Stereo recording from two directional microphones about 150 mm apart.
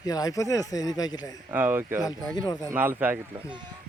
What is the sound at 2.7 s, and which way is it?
Speech, 15° right (ahead or behind).